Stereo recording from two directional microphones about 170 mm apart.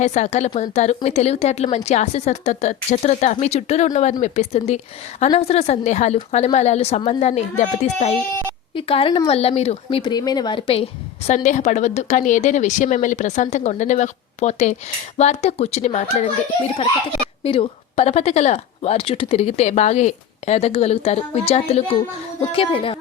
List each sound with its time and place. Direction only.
0.0 s a woman's voice: 40° left (ahead or behind)
8.7 s a woman's voice: 30° left (ahead or behind)
11.3 s a woman's voice: 40° left (ahead or behind)
17.4 s a woman's voice: 35° left (ahead or behind)